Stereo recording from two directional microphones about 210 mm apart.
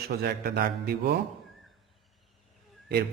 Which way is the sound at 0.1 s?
50° right (ahead or behind).